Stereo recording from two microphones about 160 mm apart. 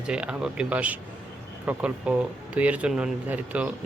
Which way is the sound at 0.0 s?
5° right (ahead or behind).